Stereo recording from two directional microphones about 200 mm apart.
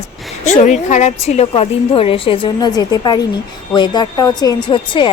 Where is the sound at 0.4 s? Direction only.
35° left (ahead or behind).